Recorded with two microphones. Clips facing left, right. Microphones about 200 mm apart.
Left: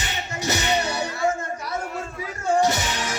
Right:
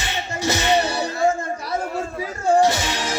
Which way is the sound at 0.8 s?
30° right (ahead or behind).